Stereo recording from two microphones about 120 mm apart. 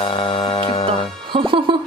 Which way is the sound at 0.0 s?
45° left (ahead or behind).